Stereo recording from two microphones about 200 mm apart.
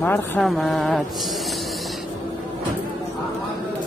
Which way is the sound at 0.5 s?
Centre (ahead or behind).